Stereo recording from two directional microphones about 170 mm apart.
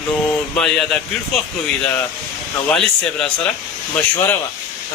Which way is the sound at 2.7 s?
5° left (ahead or behind).